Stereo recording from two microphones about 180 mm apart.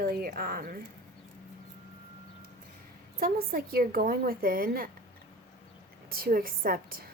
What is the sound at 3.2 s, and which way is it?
Speech, 55° right (ahead or behind).